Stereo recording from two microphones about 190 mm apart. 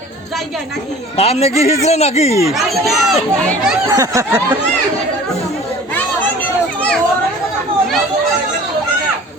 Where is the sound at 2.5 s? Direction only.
Centre (ahead or behind).